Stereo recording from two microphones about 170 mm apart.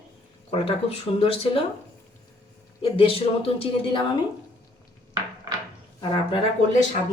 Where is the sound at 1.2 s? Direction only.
35° left (ahead or behind).